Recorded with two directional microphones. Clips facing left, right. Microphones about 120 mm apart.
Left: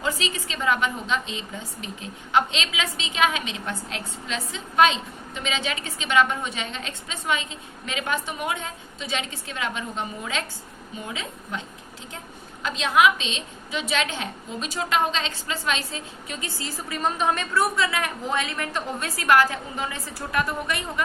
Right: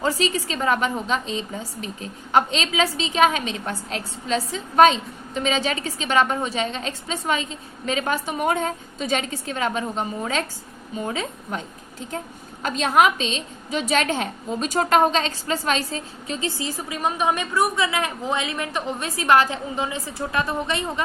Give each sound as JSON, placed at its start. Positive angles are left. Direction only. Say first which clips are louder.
{"t": 0.0, "sound": "a woman's voice", "louder": "right 5 dB", "side_deg": -40}
{"t": 12.6, "sound": "a woman's voice", "louder": "right 2 dB", "side_deg": -45}
{"t": 16.6, "sound": "a woman's voice", "louder": "right 2 dB", "side_deg": -15}